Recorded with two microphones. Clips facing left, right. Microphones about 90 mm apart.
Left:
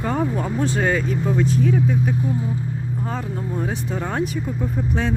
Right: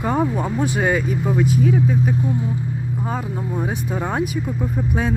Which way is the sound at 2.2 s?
25° right (ahead or behind).